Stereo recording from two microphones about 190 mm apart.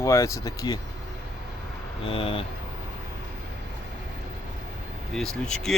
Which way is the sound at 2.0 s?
30° left (ahead or behind).